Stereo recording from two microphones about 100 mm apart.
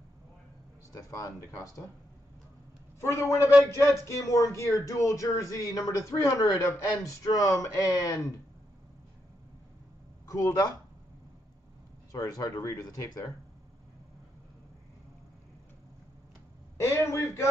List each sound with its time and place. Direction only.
0.9 s speech: 35° left (ahead or behind)
3.0 s a man's voice: 25° left (ahead or behind)
10.2 s speech: 35° left (ahead or behind)
12.1 s speech: 35° left (ahead or behind)
16.8 s a man's voice: 30° left (ahead or behind)